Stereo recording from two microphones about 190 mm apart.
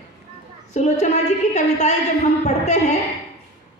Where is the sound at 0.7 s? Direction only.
35° left (ahead or behind).